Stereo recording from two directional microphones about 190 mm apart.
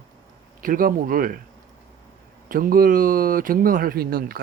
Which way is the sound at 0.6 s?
45° right (ahead or behind).